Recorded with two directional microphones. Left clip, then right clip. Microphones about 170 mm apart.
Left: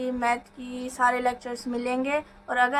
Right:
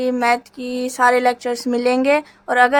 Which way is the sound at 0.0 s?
55° right (ahead or behind).